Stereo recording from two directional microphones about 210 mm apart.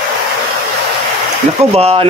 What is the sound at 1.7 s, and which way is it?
Speech, 30° right (ahead or behind).